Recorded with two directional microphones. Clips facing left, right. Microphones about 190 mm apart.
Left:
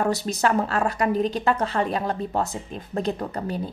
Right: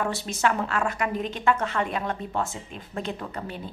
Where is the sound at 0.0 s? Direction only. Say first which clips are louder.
Left 3 dB; 40° left (ahead or behind).